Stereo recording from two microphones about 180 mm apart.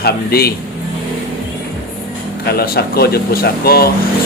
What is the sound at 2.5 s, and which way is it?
Speech, 60° left (ahead or behind).